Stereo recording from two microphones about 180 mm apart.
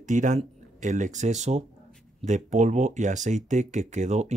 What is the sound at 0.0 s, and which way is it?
Speech, 45° right (ahead or behind).